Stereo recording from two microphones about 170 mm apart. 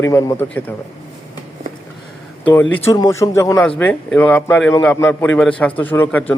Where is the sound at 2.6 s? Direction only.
10° left (ahead or behind).